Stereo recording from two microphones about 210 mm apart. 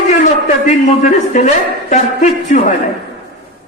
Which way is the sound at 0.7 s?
35° left (ahead or behind).